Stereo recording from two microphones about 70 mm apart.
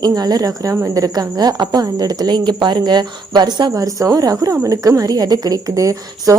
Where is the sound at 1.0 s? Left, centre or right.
Right.